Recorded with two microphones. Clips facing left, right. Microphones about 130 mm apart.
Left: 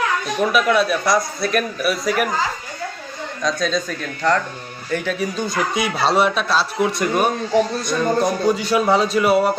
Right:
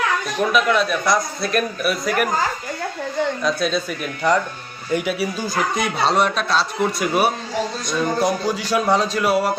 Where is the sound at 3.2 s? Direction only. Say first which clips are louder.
Right 11 dB; 70° right (ahead or behind).